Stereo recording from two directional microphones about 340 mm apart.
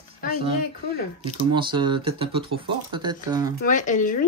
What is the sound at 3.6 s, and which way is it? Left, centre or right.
Speech, left.